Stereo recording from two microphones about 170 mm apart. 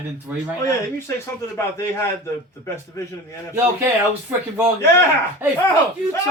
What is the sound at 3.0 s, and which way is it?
Speech, 20° left (ahead or behind).